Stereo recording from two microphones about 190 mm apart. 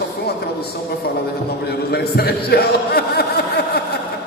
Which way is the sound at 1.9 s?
55° left (ahead or behind).